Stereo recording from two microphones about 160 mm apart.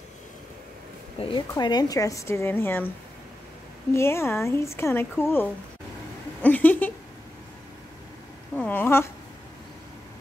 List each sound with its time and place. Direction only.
1.3 s a woman's voice: 25° left (ahead or behind)
3.9 s a woman's voice: 15° left (ahead or behind)
8.5 s a woman's voice: 10° left (ahead or behind)